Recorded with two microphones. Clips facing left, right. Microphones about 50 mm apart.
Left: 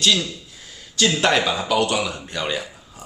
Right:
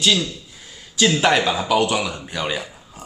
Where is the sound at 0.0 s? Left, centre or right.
Centre.